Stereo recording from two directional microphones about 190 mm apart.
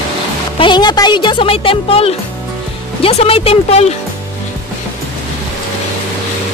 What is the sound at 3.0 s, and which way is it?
Speech, 30° left (ahead or behind).